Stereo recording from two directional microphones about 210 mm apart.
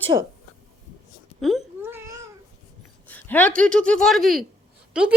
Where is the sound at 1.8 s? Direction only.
10° right (ahead or behind).